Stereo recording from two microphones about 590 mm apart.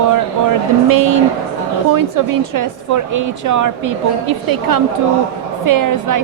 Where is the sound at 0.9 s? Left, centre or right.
Right.